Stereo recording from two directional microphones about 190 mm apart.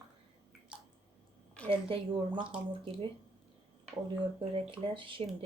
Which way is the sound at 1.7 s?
30° right (ahead or behind).